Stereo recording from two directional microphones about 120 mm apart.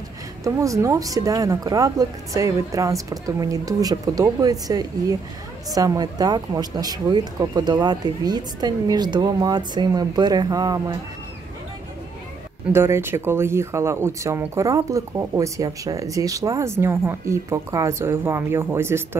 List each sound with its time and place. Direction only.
0.4 s speech: 25° right (ahead or behind)
12.7 s speech: 20° right (ahead or behind)